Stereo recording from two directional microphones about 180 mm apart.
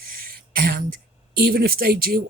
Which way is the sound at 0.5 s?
55° right (ahead or behind).